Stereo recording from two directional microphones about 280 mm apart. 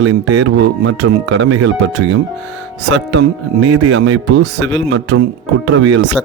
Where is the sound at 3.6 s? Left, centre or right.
Right.